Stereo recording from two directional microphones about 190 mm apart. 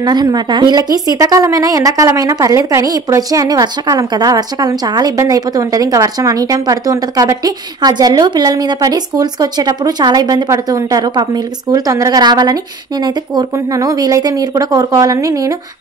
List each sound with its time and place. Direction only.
0.0 s a woman's voice: 20° right (ahead or behind)